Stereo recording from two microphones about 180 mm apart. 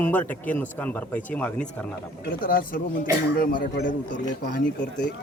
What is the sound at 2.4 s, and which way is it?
Speech, 55° left (ahead or behind).